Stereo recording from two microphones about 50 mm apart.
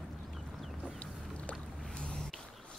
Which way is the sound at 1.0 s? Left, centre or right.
Left.